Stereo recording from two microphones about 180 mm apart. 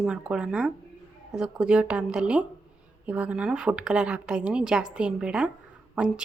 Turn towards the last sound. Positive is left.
turn(degrees=-5)  # may be behind; listen again after turning